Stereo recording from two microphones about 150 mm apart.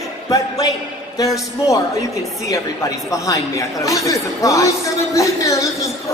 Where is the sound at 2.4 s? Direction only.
20° left (ahead or behind).